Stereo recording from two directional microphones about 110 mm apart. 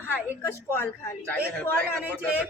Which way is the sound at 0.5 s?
20° left (ahead or behind).